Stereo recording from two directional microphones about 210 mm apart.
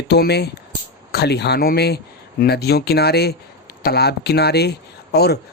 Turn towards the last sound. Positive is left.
turn(degrees=50)  # may be behind; listen again after turning